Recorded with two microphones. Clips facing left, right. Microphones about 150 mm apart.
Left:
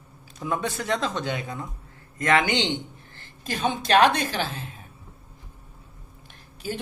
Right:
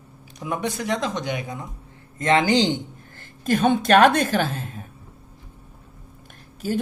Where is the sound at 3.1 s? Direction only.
50° right (ahead or behind).